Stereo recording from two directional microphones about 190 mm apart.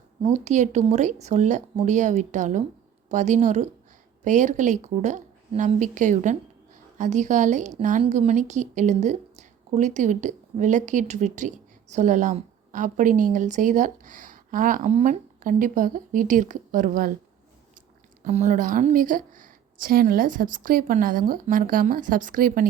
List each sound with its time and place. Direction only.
0.2 s a woman's voice: 35° right (ahead or behind)
18.2 s a woman's voice: 35° right (ahead or behind)